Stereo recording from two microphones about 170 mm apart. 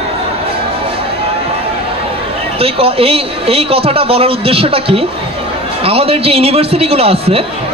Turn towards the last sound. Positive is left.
turn(degrees=-35)  # may be behind; listen again after turning